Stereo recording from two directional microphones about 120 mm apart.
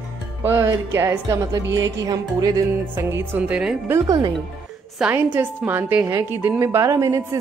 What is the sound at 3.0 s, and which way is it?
Speech, 20° right (ahead or behind).